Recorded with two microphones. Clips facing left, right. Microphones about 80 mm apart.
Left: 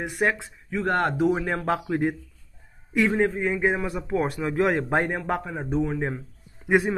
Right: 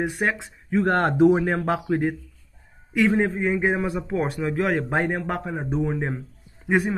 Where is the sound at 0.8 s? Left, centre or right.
Right.